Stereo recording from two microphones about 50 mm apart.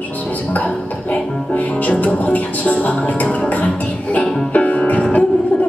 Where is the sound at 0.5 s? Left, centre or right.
Left.